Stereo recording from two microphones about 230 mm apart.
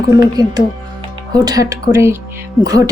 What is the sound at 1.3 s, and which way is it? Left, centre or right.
Speech, centre.